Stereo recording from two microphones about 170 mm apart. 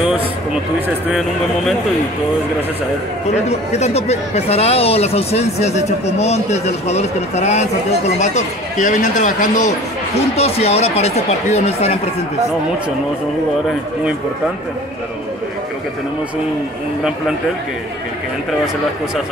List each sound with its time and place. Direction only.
3.4 s speech: 40° left (ahead or behind)